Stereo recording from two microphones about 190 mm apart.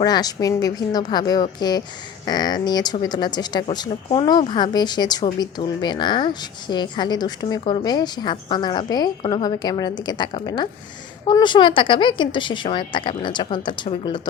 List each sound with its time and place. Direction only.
0.0 s speech: 20° left (ahead or behind)